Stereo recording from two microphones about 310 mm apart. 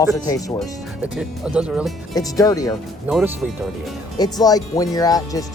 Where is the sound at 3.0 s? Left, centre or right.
Centre.